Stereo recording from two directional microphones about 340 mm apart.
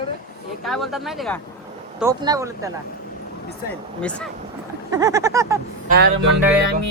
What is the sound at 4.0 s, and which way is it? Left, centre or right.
Speech, centre.